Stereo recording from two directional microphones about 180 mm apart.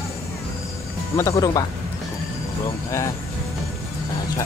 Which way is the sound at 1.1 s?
15° left (ahead or behind).